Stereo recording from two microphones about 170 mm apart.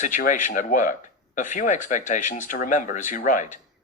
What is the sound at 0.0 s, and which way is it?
Speech, 50° left (ahead or behind).